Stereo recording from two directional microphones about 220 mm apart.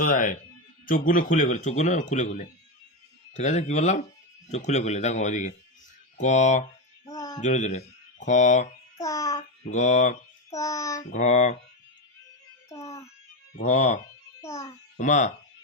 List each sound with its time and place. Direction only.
0.0 s speech: 35° left (ahead or behind)
7.0 s a sound: 15° left (ahead or behind)
7.4 s speech: 35° left (ahead or behind)
9.0 s babbling: 15° left (ahead or behind)
9.6 s speech: 35° left (ahead or behind)
10.5 s child singing: 15° left (ahead or behind)
11.1 s speech: 35° left (ahead or behind)
12.6 s music: 15° left (ahead or behind)
13.6 s speech: 30° left (ahead or behind)
14.4 s a child's voice: 10° left (ahead or behind)
14.9 s speech: 35° left (ahead or behind)